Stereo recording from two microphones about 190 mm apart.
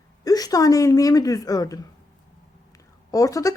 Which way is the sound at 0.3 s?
20° left (ahead or behind).